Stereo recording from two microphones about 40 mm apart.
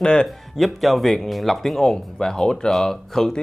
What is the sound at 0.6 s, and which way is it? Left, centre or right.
Speech, centre.